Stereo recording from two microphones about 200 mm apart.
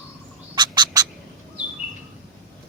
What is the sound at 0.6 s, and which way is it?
Duck, 20° right (ahead or behind).